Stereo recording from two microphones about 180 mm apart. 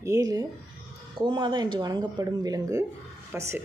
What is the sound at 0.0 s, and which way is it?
Speech, 20° right (ahead or behind).